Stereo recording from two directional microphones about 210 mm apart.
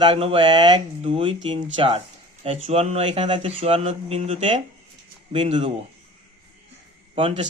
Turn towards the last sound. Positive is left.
turn(degrees=-25)  # may be behind; listen again after turning